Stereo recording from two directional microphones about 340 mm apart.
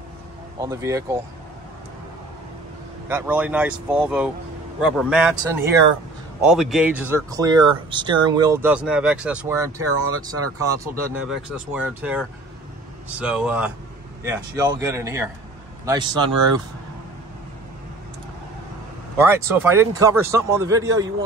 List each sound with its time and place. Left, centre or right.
0.6 s speech: centre
3.1 s speech: centre
9.8 s speech: right
10.8 s speech: centre
19.1 s speech: centre